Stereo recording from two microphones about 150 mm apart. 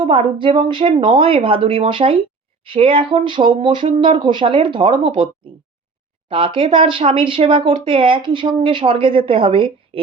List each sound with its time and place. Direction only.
0.0 s speech: 40° right (ahead or behind)